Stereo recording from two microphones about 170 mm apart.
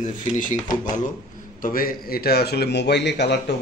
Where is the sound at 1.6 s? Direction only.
55° left (ahead or behind); by 3.5 s 75° left (ahead or behind).